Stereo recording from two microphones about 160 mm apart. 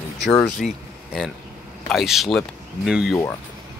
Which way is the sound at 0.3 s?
Centre (ahead or behind).